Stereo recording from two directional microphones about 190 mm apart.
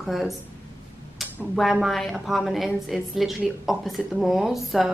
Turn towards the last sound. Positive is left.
turn(degrees=0)  # may be behind; listen again after turning